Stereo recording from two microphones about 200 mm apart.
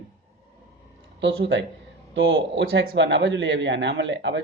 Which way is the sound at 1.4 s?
65° right (ahead or behind).